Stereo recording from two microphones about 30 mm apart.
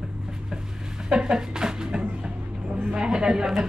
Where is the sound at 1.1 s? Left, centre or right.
Right.